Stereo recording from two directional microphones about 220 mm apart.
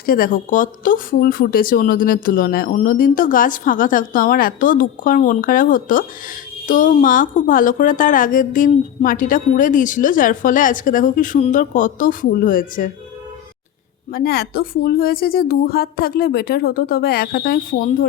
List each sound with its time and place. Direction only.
0.0 s a woman's voice: 40° left (ahead or behind)
14.1 s speech: 45° left (ahead or behind)